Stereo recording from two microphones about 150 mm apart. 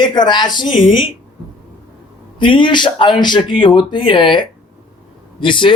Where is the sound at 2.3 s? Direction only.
35° left (ahead or behind).